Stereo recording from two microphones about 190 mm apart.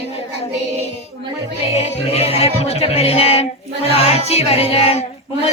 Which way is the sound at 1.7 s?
35° left (ahead or behind).